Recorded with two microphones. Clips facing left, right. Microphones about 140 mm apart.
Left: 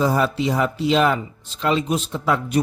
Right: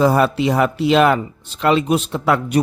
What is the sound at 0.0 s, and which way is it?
Speech, 65° right (ahead or behind).